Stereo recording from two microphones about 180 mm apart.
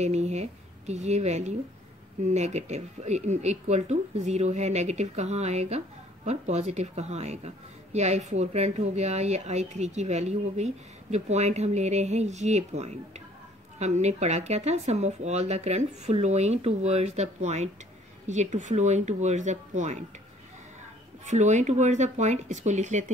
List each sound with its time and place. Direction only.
0.0 s a woman's voice: 40° right (ahead or behind)
21.3 s a woman's voice: 40° right (ahead or behind)